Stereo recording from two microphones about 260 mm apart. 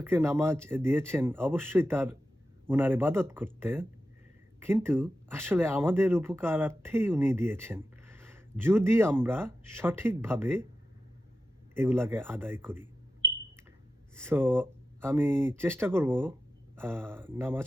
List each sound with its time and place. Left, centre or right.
0.0 s speech: centre
11.7 s speech: centre
14.2 s speech: centre